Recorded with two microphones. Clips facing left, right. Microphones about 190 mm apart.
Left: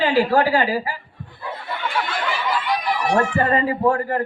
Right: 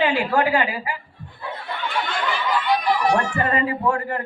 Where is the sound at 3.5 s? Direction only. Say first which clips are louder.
Left 3 dB; 35° left (ahead or behind).